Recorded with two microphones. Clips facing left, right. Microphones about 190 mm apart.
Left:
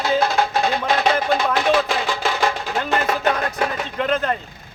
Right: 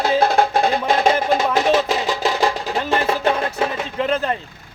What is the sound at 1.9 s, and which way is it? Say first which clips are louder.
Music: right 2 dB; 35° right (ahead or behind).